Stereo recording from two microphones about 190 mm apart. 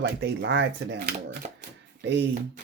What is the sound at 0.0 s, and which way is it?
Speech, 55° right (ahead or behind).